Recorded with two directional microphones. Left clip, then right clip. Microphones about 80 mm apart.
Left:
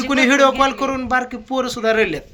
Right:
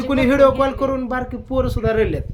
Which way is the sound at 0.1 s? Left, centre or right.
Right.